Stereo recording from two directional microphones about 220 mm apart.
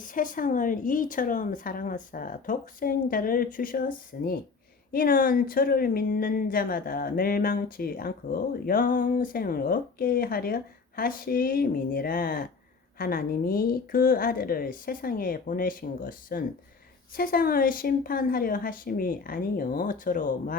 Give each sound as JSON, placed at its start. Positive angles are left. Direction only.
{"t": 0.0, "sound": "speech", "side_deg": 35}